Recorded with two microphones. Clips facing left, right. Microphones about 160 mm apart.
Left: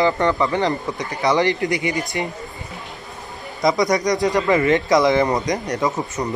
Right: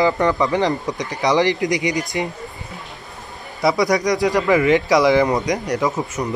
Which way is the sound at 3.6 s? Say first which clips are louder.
Right 1 dB; 5° right (ahead or behind).